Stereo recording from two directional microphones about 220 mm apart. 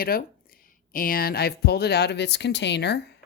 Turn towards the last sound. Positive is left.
turn(degrees=50)  # may be behind; listen again after turning